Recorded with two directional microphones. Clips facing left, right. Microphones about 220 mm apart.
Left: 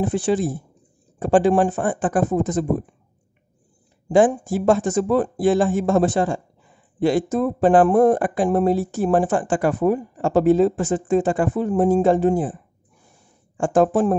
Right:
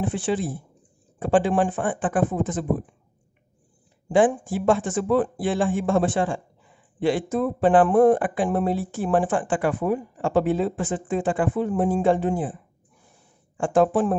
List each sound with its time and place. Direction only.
0.0 s speech: 40° left (ahead or behind)
4.1 s speech: 40° left (ahead or behind)
13.6 s speech: 45° left (ahead or behind)